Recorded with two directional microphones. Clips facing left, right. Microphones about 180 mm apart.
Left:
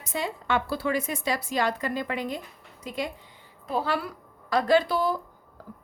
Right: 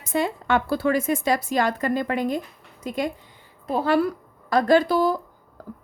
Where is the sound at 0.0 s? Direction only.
55° right (ahead or behind).